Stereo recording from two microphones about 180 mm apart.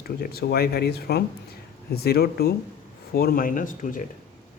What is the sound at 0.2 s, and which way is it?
Speech, 60° left (ahead or behind).